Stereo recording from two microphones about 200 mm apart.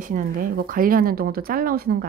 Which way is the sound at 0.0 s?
45° right (ahead or behind).